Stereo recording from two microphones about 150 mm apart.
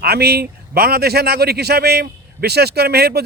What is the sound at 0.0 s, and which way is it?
A man's voice, 90° right.